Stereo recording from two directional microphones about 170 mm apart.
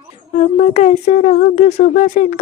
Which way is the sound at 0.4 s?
45° left (ahead or behind).